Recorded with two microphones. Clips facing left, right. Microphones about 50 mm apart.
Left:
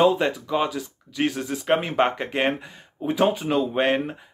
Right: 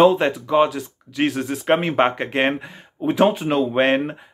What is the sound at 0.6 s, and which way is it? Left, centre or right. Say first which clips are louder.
Speech: right 4 dB; right.